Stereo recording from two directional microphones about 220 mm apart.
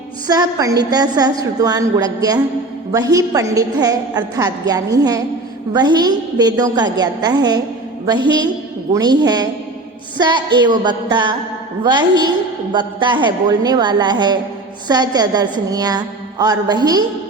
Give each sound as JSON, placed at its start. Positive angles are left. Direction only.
{"t": 0.3, "sound": "a woman's voice", "side_deg": -15}